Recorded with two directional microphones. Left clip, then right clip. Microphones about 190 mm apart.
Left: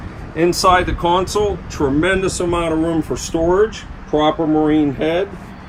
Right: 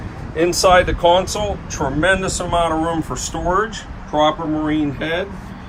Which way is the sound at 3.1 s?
55° right (ahead or behind).